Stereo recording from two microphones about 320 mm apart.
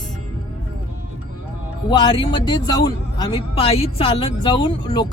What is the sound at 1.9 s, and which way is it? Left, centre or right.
Speech, centre.